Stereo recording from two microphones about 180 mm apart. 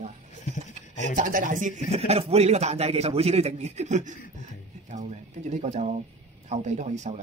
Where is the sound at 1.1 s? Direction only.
45° right (ahead or behind).